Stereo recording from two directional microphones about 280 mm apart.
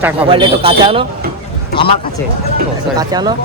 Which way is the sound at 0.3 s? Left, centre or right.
Centre.